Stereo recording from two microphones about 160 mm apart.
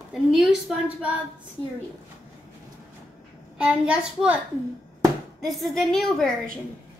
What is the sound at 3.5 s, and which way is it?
Speech, 5° right (ahead or behind).